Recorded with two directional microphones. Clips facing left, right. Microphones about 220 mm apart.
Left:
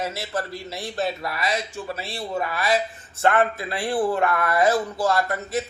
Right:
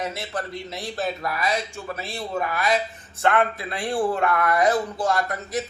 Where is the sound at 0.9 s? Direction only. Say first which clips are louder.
Left 1 dB; 30° left (ahead or behind).